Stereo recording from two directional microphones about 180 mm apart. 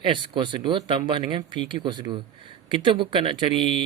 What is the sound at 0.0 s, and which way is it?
Speech, 25° right (ahead or behind).